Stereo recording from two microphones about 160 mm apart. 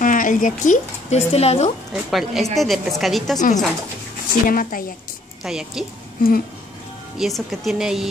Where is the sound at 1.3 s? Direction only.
40° left (ahead or behind).